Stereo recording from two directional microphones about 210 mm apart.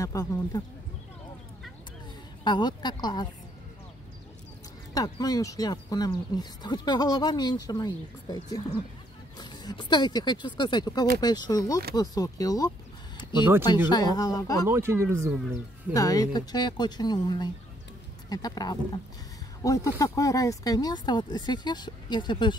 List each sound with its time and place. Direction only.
0.0 s speech: 15° left (ahead or behind)
2.4 s speech: 20° left (ahead or behind)
4.9 s speech: 15° left (ahead or behind)
14.7 s speech: 10° right (ahead or behind)
15.9 s speech: 15° left (ahead or behind)